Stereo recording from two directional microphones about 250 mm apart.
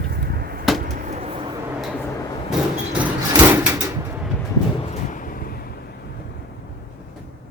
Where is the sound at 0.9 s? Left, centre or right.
Right.